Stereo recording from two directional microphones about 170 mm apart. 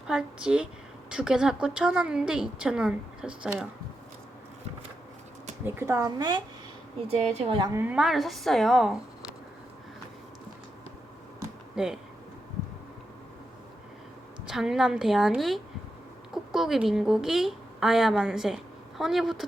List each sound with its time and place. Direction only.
0.1 s a woman's voice: 5° right (ahead or behind)
5.6 s a woman's voice: 15° right (ahead or behind)
7.3 s a woman's voice: 35° right (ahead or behind)
7.7 s a woman's voice: 10° right (ahead or behind)
11.7 s speech: 5° right (ahead or behind)
14.4 s a woman's voice: 5° right (ahead or behind)